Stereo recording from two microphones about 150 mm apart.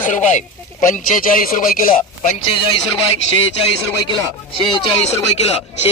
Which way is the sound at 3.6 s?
30° left (ahead or behind).